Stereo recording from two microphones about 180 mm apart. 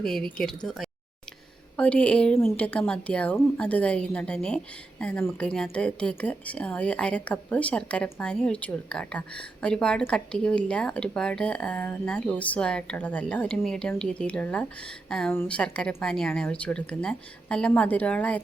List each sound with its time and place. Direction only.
0.0 s a woman's voice: 5° left (ahead or behind)